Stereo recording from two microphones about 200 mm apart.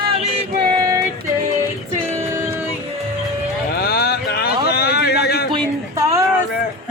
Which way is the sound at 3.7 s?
50° left (ahead or behind).